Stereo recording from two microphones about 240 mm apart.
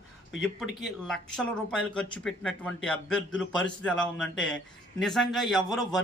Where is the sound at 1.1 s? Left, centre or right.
Centre.